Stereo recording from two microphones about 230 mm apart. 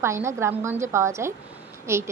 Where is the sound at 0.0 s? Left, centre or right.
Centre.